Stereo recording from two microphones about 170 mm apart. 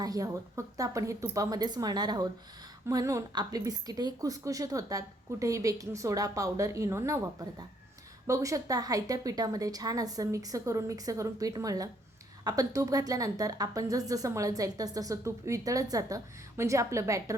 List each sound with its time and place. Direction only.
0.0 s a woman's voice: 20° right (ahead or behind)